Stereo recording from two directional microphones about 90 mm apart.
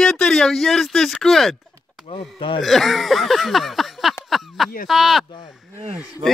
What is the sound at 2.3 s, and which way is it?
Speech, 80° left.